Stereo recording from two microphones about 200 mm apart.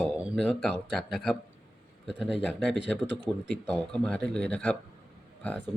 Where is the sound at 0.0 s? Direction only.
Centre (ahead or behind).